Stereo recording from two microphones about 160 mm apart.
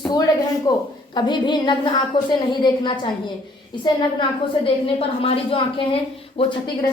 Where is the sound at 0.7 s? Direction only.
25° left (ahead or behind).